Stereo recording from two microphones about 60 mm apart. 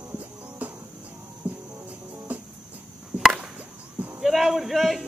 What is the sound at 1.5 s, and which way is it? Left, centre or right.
Music, right.